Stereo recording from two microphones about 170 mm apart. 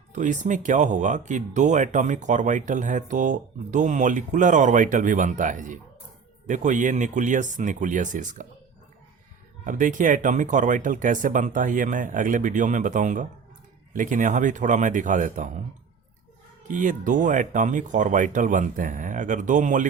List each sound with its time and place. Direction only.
0.1 s speech: 45° right (ahead or behind)
9.6 s speech: 50° right (ahead or behind)
16.6 s speech: 50° right (ahead or behind)